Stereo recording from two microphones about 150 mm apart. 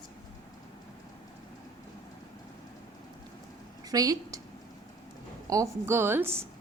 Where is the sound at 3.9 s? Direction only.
25° right (ahead or behind).